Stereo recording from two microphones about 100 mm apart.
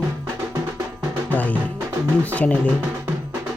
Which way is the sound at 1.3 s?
15° left (ahead or behind).